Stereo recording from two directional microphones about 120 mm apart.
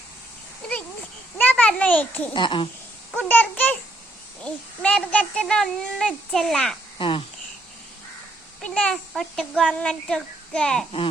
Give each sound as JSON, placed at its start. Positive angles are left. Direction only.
{"t": 1.4, "sound": "a child's voice", "side_deg": 15}
{"t": 2.3, "sound": "speech", "side_deg": 40}
{"t": 3.2, "sound": "a child's voice", "side_deg": 10}
{"t": 7.0, "sound": "speech", "side_deg": 45}
{"t": 8.6, "sound": "a child's voice", "side_deg": 10}